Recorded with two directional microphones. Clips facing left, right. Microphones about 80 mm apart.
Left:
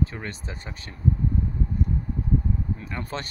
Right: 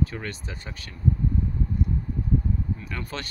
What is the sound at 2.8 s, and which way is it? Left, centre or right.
Speech, left.